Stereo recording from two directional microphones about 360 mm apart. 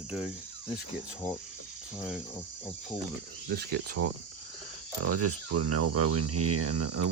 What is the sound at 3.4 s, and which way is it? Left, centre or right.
Speech, right.